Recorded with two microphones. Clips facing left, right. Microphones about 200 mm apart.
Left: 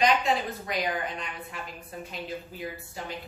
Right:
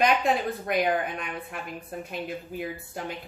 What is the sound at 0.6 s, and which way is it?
A woman's voice, 55° right (ahead or behind).